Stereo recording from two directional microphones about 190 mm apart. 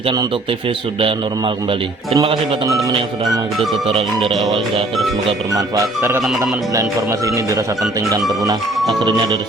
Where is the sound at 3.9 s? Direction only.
30° right (ahead or behind).